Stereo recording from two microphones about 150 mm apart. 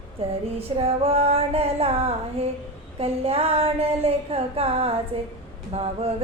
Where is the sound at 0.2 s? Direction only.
40° right (ahead or behind).